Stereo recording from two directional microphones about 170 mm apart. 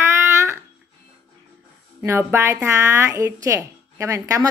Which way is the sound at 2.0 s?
15° right (ahead or behind).